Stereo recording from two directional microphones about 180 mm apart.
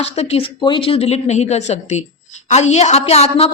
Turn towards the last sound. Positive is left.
turn(degrees=35)  # may be behind; listen again after turning